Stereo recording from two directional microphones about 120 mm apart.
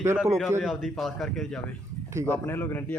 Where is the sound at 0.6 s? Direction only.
Centre (ahead or behind).